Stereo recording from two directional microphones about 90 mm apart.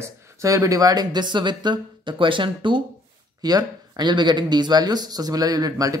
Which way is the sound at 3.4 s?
45° right (ahead or behind).